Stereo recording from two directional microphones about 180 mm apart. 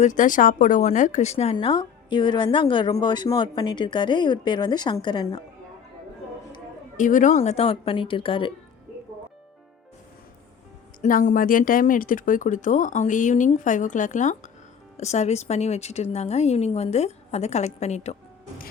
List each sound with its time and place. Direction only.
0.0 s speech: 45° left (ahead or behind); by 5.4 s 20° left (ahead or behind)
6.9 s speech: 45° left (ahead or behind); by 8.5 s 30° left (ahead or behind)
11.0 s speech: 45° left (ahead or behind)